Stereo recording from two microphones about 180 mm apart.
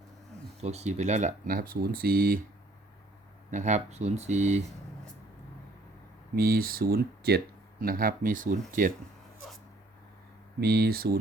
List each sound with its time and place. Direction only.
0.6 s speech: 35° right (ahead or behind); by 2.4 s 55° right (ahead or behind)
3.5 s speech: 40° right (ahead or behind)
6.3 s speech: 55° right (ahead or behind)
10.6 s speech: 60° right (ahead or behind)